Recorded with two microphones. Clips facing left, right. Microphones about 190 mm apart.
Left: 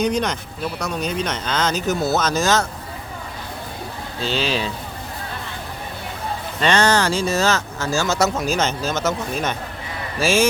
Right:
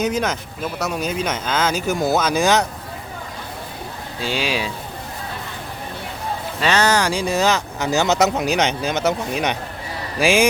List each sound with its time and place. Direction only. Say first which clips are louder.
0.0 s speech: even; 5° right (ahead or behind)
4.2 s speech: left 1 dB; 10° right (ahead or behind)
6.6 s speech: left 1 dB; 5° right (ahead or behind)